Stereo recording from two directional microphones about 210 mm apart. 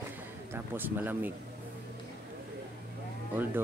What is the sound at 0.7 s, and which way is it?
Speech, 10° right (ahead or behind).